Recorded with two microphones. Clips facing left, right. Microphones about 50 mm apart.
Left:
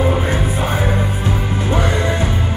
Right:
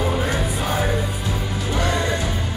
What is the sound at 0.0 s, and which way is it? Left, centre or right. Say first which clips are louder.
Music: left 4 dB; left.